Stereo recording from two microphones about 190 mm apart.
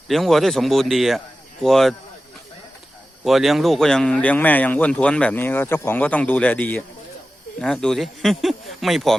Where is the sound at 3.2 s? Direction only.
Centre (ahead or behind).